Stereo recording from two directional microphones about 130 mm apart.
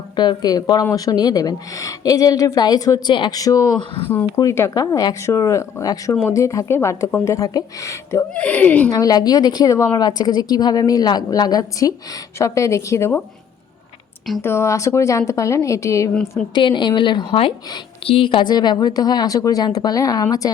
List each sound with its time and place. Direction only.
0.2 s a woman's voice: 30° left (ahead or behind)
8.3 s speech: 10° left (ahead or behind)
8.9 s a woman's voice: 30° left (ahead or behind)
14.4 s a woman's voice: 20° left (ahead or behind)
16.6 s a woman's voice: 35° left (ahead or behind)